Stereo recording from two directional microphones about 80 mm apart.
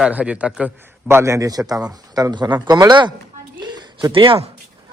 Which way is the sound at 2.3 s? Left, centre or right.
Right.